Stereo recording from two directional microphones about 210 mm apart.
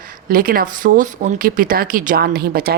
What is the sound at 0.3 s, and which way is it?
A woman's voice, 45° right (ahead or behind).